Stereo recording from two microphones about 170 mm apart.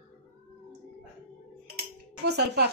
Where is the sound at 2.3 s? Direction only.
75° right (ahead or behind).